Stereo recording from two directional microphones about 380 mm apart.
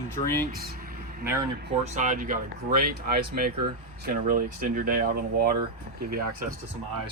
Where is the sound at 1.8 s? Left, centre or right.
Centre.